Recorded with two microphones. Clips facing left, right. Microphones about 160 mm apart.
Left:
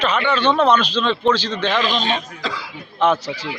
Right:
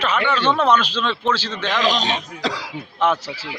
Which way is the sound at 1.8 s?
90° right.